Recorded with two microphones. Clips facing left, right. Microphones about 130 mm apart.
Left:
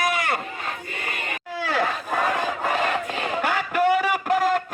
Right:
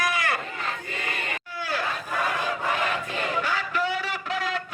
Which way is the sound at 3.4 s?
55° left (ahead or behind).